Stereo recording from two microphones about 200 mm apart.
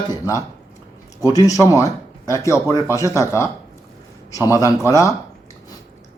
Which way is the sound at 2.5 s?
15° left (ahead or behind).